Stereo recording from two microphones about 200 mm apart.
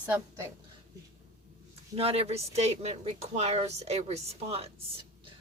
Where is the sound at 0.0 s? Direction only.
10° right (ahead or behind).